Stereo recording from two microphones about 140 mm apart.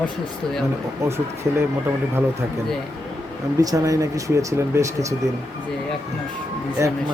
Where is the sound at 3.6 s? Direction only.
25° right (ahead or behind).